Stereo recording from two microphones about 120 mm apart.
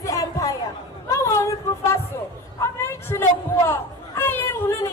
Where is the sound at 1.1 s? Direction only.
25° left (ahead or behind).